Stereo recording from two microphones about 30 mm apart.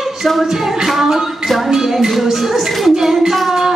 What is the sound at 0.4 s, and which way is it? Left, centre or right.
Child singing, centre.